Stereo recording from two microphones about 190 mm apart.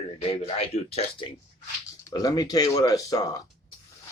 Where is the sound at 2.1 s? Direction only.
20° left (ahead or behind).